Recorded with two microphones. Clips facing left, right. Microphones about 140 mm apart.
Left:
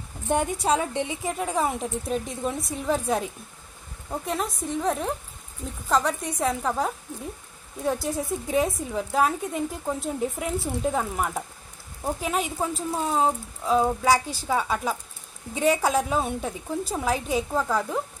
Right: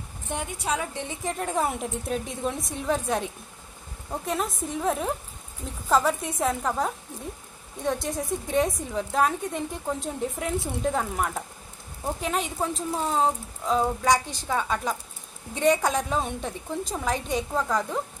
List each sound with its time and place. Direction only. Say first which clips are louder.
0.7 s a woman's voice: left 3 dB; 30° left (ahead or behind)
1.0 s a woman's voice: left 1 dB; 5° left (ahead or behind)